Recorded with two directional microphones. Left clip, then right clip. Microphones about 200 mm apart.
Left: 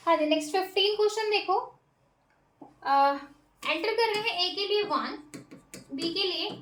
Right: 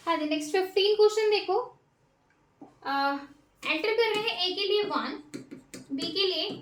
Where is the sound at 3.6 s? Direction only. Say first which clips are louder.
Right 1 dB; 20° left (ahead or behind).